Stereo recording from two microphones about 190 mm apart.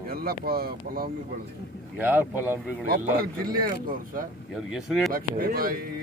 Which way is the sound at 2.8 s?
50° right (ahead or behind).